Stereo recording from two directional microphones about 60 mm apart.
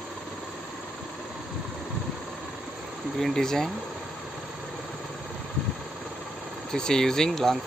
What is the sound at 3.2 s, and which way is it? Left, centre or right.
Speech, centre.